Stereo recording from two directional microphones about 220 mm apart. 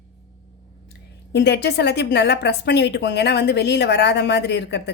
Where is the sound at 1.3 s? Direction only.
50° left (ahead or behind).